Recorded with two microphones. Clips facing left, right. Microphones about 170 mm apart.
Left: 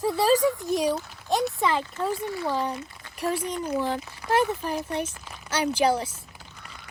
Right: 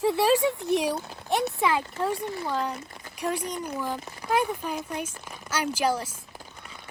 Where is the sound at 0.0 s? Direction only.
Centre (ahead or behind).